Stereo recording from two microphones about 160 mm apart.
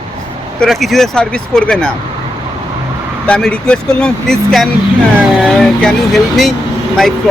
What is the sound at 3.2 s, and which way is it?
Speech, 5° left (ahead or behind).